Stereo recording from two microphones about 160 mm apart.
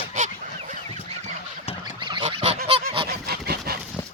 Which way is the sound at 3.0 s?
75° right (ahead or behind).